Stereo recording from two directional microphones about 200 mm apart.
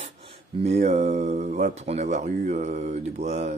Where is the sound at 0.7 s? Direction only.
35° right (ahead or behind).